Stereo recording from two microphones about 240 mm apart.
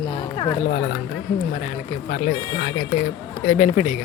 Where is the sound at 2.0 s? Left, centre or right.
Left.